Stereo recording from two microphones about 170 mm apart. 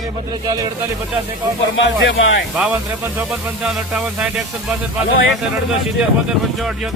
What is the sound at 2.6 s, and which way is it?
Speech, 10° right (ahead or behind).